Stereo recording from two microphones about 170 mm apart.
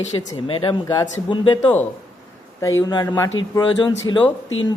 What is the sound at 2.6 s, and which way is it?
Speech, 20° left (ahead or behind).